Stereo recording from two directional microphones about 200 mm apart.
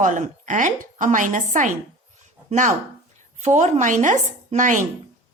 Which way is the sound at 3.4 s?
35° right (ahead or behind).